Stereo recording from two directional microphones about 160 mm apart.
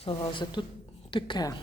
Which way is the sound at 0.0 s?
30° left (ahead or behind).